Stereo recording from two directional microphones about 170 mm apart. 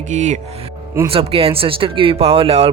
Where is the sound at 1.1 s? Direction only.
35° right (ahead or behind).